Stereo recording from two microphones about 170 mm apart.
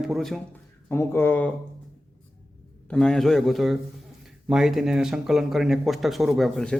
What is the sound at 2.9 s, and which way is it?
Speech, 5° left (ahead or behind).